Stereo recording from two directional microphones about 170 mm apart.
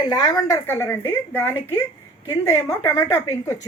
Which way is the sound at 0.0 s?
20° left (ahead or behind).